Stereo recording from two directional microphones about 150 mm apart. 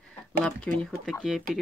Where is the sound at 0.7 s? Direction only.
10° left (ahead or behind).